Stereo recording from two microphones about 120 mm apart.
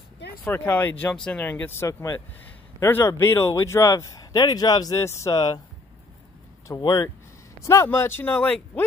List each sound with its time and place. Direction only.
0.5 s speech: 20° left (ahead or behind); by 5.6 s 35° left (ahead or behind)
6.8 s speech: 40° left (ahead or behind)
7.6 s speech: 25° left (ahead or behind)